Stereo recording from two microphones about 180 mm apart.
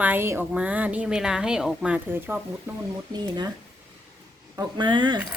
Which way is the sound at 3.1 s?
25° right (ahead or behind).